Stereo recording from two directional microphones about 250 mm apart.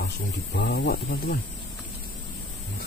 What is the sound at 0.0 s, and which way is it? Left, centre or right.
Speech, left.